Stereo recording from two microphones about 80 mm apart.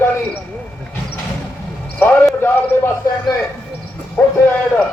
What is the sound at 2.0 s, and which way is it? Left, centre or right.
Speech, left.